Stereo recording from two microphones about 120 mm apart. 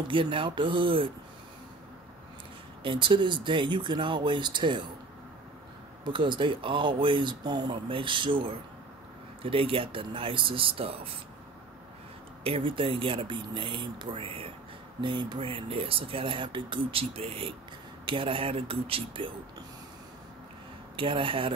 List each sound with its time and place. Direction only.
0.1 s speech: 45° right (ahead or behind)
2.8 s speech: 45° right (ahead or behind)
6.0 s speech: 40° right (ahead or behind)
12.4 s speech: 50° right (ahead or behind)
20.9 s speech: 45° right (ahead or behind)